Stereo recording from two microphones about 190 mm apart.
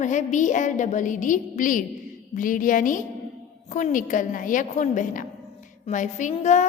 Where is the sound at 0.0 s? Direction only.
40° left (ahead or behind).